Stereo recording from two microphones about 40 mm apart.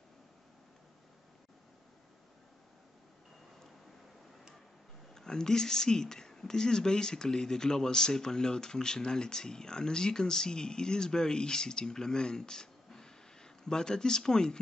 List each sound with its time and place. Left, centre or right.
5.1 s speech: centre